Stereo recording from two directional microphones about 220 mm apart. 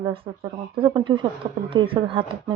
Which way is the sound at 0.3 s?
25° right (ahead or behind).